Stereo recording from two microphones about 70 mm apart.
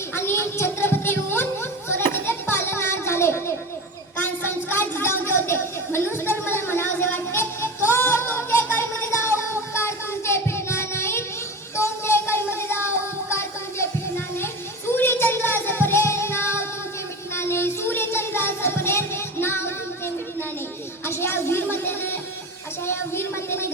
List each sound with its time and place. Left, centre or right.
0.1 s music: left
1.9 s children playing: left
4.2 s a sound: left
11.8 s music: left
17.3 s child singing: left
21.0 s a sound: left